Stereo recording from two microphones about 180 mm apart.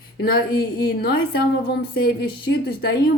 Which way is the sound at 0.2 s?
60° left (ahead or behind).